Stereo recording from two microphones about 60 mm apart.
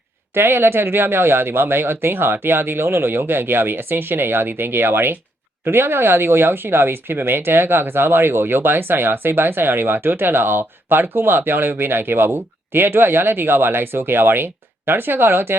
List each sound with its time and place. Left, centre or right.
0.3 s speech: right